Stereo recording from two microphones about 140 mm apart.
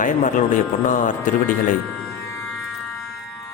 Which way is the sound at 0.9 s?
70° left (ahead or behind).